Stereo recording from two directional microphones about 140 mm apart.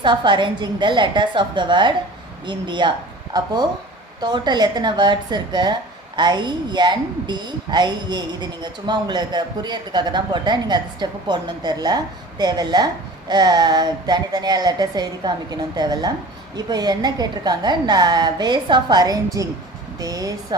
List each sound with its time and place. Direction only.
0.0 s a woman's voice: 35° right (ahead or behind)